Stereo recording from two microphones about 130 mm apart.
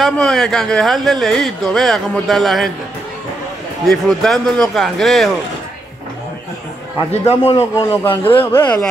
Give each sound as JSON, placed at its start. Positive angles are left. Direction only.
{"t": 0.0, "sound": "speech", "side_deg": 5}
{"t": 3.8, "sound": "speech", "side_deg": 5}
{"t": 7.1, "sound": "a man's voice", "side_deg": 55}
{"t": 7.8, "sound": "a man's voice", "side_deg": 25}
{"t": 8.5, "sound": "speech", "side_deg": 15}